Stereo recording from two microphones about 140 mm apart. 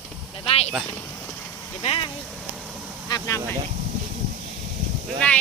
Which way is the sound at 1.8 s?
40° left (ahead or behind).